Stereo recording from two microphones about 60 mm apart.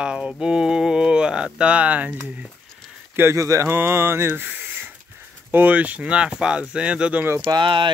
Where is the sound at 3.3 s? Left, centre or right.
Right.